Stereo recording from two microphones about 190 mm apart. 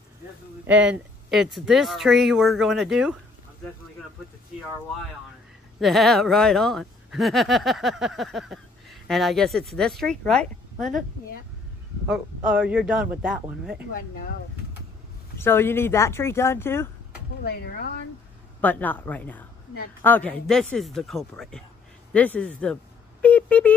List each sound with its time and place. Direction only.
0.7 s speech: 5° right (ahead or behind)
5.8 s speech: centre (ahead or behind)
12.1 s speech: 5° right (ahead or behind)
15.3 s speech: 10° left (ahead or behind)
17.5 s speech: 55° left (ahead or behind)
18.6 s speech: 10° left (ahead or behind)